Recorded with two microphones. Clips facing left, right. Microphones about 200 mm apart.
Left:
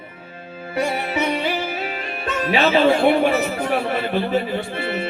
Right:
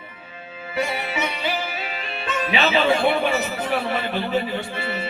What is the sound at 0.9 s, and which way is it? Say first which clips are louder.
Speech: left 5 dB; 50° left (ahead or behind).